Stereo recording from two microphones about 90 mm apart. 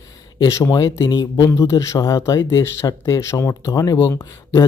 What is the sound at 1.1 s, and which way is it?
Speech, 45° left (ahead or behind).